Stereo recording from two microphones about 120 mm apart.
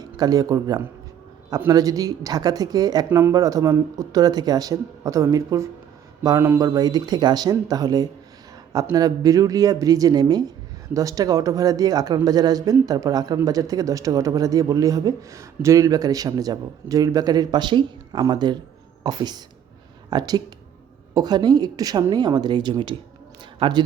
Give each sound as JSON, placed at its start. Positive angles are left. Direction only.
{"t": 0.0, "sound": "speech", "side_deg": -30}
{"t": 3.1, "sound": "speech", "side_deg": -20}